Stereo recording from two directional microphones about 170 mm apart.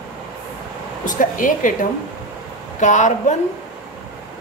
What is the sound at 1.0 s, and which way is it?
A woman's voice, 50° left (ahead or behind).